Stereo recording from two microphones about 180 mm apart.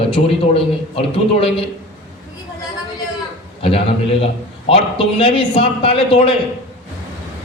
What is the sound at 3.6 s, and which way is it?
A man's voice, 30° left (ahead or behind).